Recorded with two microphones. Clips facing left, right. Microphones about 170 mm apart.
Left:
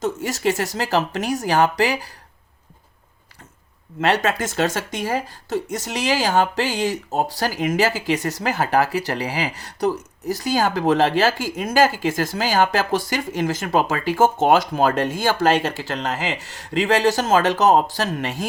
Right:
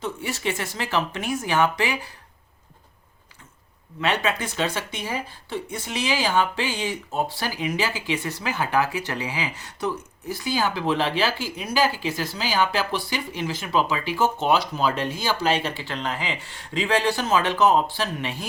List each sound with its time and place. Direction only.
0.0 s speech: 40° left (ahead or behind)
4.0 s speech: 40° left (ahead or behind)